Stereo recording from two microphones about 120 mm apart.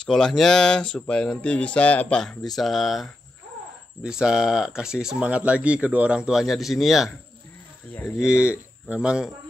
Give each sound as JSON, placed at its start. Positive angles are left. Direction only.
{"t": 0.0, "sound": "speech", "side_deg": 5}
{"t": 7.9, "sound": "speech", "side_deg": 20}
{"t": 8.2, "sound": "speech", "side_deg": -10}